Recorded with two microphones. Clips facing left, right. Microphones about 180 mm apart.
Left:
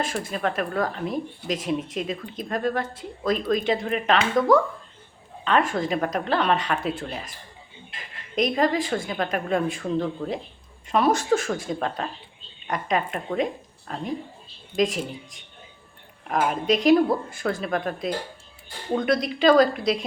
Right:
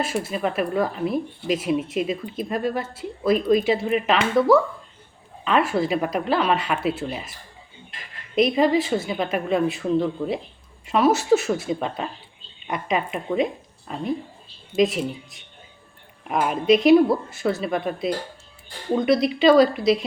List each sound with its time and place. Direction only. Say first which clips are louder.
0.0 s speech: right 2 dB; 5° right (ahead or behind)
8.4 s a woman's voice: right 4 dB; 5° right (ahead or behind)
16.7 s speech: right 4 dB; 5° right (ahead or behind)